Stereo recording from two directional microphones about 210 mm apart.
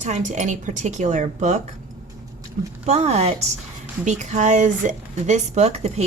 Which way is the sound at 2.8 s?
30° right (ahead or behind).